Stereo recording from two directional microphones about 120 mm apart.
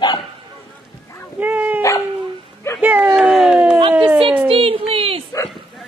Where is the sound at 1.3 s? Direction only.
15° right (ahead or behind).